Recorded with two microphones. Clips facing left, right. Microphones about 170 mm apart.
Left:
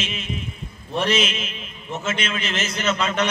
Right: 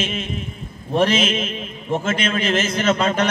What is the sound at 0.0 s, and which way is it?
A man's voice, 50° right (ahead or behind).